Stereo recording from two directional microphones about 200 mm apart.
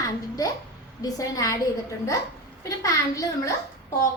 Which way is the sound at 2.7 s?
15° left (ahead or behind).